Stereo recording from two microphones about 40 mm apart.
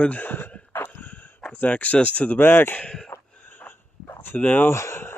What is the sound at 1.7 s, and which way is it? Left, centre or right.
Speech, left.